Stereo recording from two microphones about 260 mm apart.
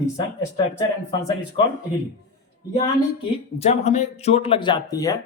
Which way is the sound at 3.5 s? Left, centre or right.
Left.